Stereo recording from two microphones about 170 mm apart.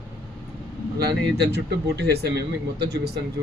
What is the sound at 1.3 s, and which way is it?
Speech, 75° right (ahead or behind).